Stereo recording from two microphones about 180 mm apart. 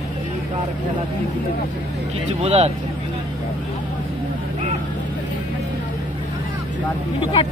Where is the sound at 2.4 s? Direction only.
35° right (ahead or behind).